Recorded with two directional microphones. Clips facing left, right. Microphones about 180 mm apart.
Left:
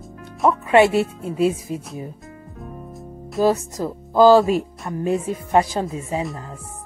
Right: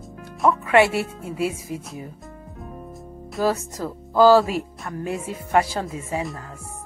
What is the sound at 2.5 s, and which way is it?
Music, centre (ahead or behind).